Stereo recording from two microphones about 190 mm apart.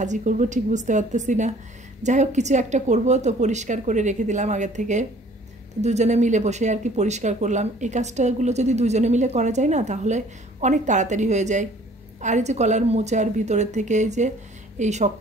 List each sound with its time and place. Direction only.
0.0 s speech: 40° right (ahead or behind)